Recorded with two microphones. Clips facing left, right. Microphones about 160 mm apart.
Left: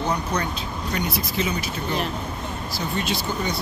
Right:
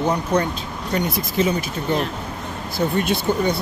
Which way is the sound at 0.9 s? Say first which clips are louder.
Right 6 dB; 45° right (ahead or behind).